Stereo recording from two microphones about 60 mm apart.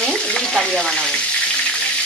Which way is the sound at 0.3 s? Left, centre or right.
Centre.